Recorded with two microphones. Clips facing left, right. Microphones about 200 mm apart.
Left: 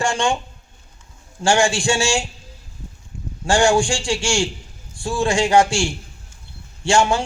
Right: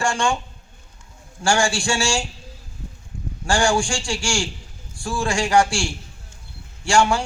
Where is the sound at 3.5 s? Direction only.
20° left (ahead or behind).